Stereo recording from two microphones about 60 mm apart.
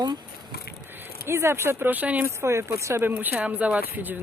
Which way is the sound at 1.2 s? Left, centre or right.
Right.